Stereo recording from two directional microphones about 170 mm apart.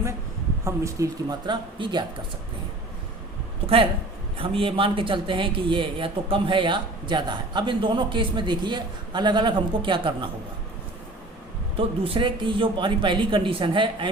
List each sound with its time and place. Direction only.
0.6 s a man's voice: 20° right (ahead or behind)
4.4 s a man's voice: 30° right (ahead or behind)
11.8 s a man's voice: 30° right (ahead or behind)